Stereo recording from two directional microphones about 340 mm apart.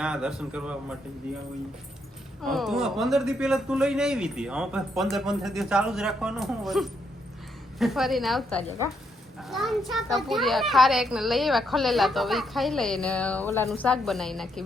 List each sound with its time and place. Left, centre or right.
0.0 s speech: centre
2.5 s speech: centre